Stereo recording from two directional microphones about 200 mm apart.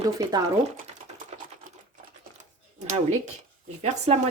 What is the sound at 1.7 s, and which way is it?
Typing, 45° right (ahead or behind).